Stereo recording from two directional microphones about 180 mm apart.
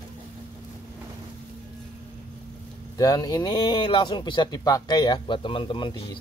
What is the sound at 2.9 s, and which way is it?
Speech, 20° left (ahead or behind).